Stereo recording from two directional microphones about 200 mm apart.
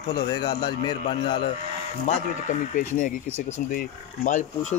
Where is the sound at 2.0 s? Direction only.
35° left (ahead or behind).